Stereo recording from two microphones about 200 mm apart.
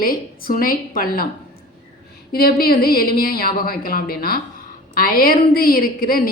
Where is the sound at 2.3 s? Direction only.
50° left (ahead or behind).